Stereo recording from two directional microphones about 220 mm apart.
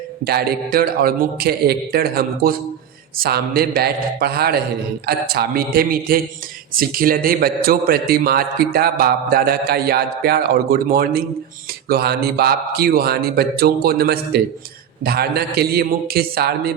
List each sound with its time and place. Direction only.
0.3 s a man's voice: 45° right (ahead or behind)